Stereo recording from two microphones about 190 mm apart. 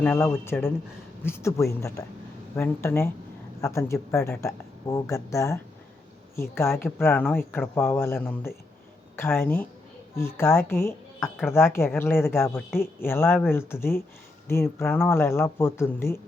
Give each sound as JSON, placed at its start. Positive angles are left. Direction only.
{"t": 0.0, "sound": "speech", "side_deg": 10}
{"t": 6.6, "sound": "speech", "side_deg": 15}